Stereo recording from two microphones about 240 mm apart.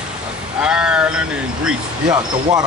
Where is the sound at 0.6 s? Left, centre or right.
Centre.